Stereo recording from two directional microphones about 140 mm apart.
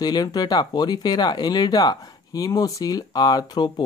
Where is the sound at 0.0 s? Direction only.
30° left (ahead or behind).